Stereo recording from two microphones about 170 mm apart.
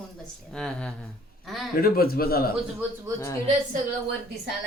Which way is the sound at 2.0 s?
60° left (ahead or behind).